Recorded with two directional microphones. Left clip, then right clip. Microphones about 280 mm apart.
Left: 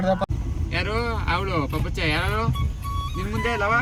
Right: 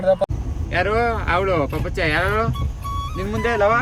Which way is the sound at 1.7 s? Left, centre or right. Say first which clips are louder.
Right 4 dB; centre.